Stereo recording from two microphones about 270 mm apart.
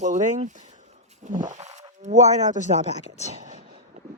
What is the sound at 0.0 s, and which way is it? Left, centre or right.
Speech, right.